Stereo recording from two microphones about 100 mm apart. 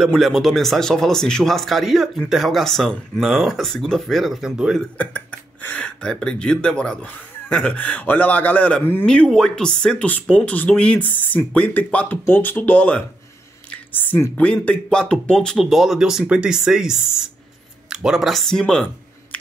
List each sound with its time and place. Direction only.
0.0 s speech: centre (ahead or behind)
4.9 s speech: 15° left (ahead or behind)
13.7 s a sound: 15° left (ahead or behind)
14.3 s speech: 10° left (ahead or behind)